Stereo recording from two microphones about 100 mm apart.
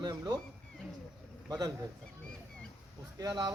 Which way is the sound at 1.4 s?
40° right (ahead or behind).